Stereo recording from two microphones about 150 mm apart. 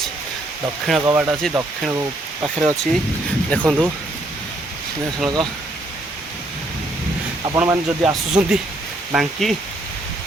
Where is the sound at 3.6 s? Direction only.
5° right (ahead or behind).